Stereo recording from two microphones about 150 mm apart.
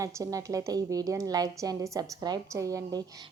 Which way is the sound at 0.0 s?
20° right (ahead or behind).